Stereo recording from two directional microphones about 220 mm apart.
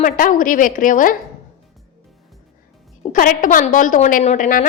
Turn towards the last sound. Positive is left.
turn(degrees=35)  # may be behind; listen again after turning